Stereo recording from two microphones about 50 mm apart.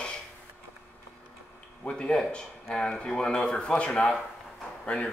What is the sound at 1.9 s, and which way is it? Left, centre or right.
Speech, centre.